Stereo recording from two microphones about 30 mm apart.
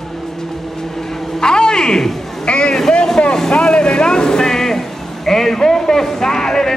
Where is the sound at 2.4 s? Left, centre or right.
Left.